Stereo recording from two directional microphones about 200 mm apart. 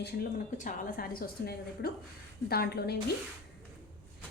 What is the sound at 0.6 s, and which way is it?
Speech, 40° left (ahead or behind).